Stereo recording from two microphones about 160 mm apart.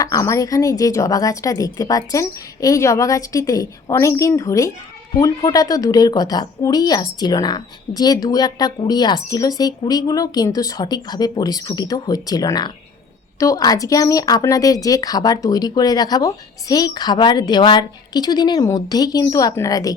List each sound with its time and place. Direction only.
0.0 s a woman's voice: 20° left (ahead or behind)